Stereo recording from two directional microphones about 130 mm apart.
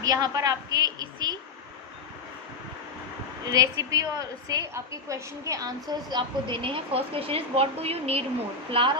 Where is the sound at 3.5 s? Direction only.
25° right (ahead or behind); by 8.2 s 50° right (ahead or behind).